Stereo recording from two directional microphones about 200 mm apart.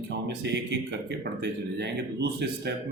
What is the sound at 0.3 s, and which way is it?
Speech, 60° right (ahead or behind).